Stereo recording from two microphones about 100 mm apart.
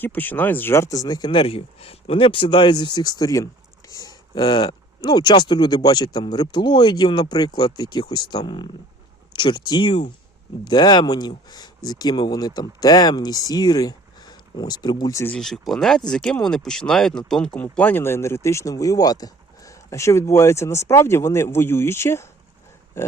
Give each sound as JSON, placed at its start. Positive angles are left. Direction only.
{"t": 0.0, "sound": "speech", "side_deg": 20}
{"t": 1.3, "sound": "speech", "side_deg": 65}
{"t": 15.3, "sound": "speech", "side_deg": 5}
{"t": 23.0, "sound": "a sound", "side_deg": 25}